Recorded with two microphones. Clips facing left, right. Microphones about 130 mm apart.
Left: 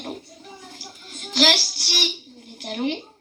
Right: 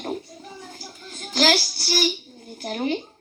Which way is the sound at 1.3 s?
40° right (ahead or behind).